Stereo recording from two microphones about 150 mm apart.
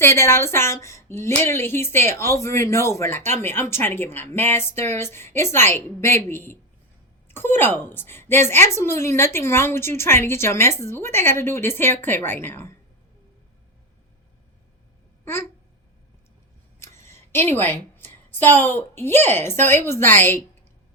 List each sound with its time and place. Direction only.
0.0 s speech: 15° left (ahead or behind)
15.2 s a sound: 15° left (ahead or behind)
16.8 s a woman's voice: 20° left (ahead or behind)